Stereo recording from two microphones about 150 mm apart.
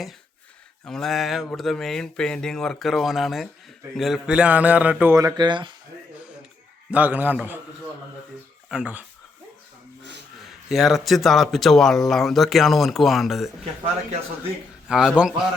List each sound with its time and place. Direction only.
0.9 s a man's voice: 5° left (ahead or behind)
5.1 s speech: 25° right (ahead or behind)
6.9 s a man's voice: 10° right (ahead or behind)
8.7 s a man's voice: 10° right (ahead or behind)
10.4 s speech: centre (ahead or behind)
14.8 s a man's voice: 5° right (ahead or behind)